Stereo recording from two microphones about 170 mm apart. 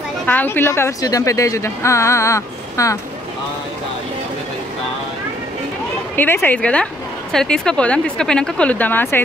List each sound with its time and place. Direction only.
0.3 s a woman's voice: 10° left (ahead or behind)
6.1 s a woman's voice: 10° left (ahead or behind)